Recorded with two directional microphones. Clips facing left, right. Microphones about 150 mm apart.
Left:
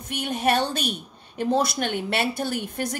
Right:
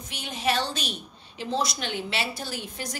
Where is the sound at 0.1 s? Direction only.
55° left (ahead or behind).